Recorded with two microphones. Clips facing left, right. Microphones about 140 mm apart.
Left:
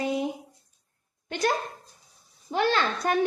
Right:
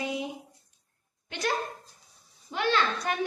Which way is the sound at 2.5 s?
40° left (ahead or behind).